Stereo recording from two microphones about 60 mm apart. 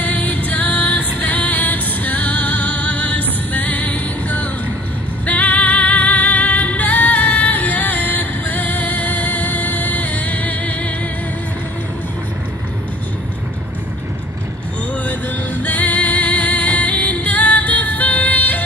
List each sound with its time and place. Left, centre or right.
0.0 s music: left
15.0 s music: left